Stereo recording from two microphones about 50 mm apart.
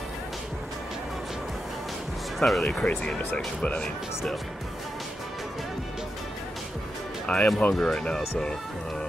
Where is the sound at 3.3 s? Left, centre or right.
Left.